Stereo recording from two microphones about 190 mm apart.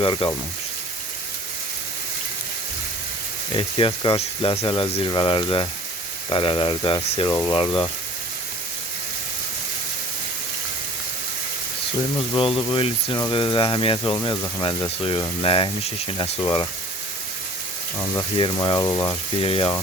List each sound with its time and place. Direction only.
0.0 s speech: 25° left (ahead or behind)
3.5 s speech: 30° left (ahead or behind)
12.3 s speech: 25° left (ahead or behind)
18.3 s speech: 25° left (ahead or behind)